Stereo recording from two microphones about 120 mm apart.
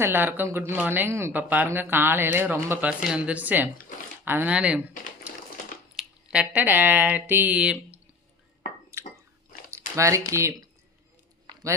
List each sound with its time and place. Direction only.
0.0 s speech: 15° right (ahead or behind)
6.0 s speech: 10° right (ahead or behind)
8.9 s squish: 25° right (ahead or behind)
9.6 s speech: 25° right (ahead or behind)